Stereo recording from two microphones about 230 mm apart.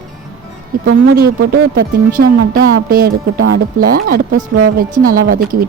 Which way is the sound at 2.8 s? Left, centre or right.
Right.